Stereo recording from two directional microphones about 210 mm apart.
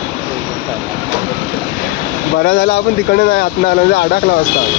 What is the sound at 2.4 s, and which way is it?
Speech, 55° left (ahead or behind).